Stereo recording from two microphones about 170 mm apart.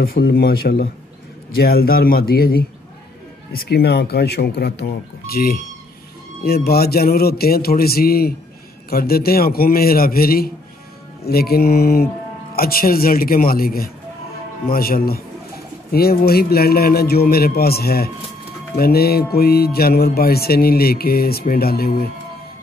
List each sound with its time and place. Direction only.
0.0 s music: 65° left (ahead or behind)
3.5 s speech: 70° left (ahead or behind)
6.4 s music: 65° left (ahead or behind)